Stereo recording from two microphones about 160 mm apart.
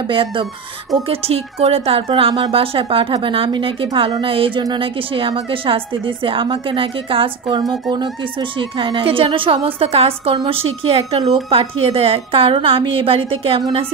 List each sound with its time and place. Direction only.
0.1 s a woman's voice: 30° right (ahead or behind)
13.6 s a woman's voice: 25° right (ahead or behind)